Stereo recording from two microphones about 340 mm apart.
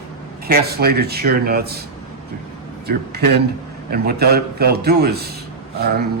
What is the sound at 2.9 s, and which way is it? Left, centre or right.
A man's voice, right.